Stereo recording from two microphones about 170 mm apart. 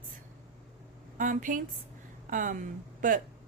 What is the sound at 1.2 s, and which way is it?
A woman's voice, 50° right (ahead or behind).